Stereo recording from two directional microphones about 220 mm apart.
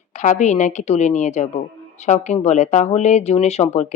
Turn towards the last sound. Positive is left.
turn(degrees=30)  # may be behind; listen again after turning